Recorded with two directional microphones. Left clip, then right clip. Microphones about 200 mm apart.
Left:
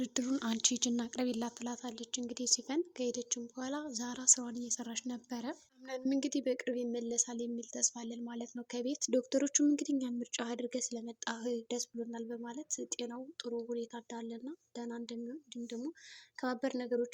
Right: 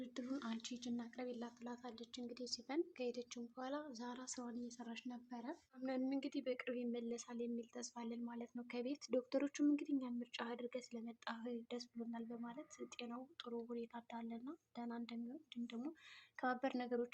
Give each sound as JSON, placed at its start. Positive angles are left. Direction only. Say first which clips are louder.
{"t": 0.0, "sound": "speech", "louder": "left 11 dB", "side_deg": 50}
{"t": 1.6, "sound": "a woman's voice", "louder": "left 9 dB", "side_deg": 40}